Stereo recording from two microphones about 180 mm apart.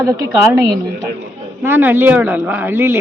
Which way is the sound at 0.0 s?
20° right (ahead or behind).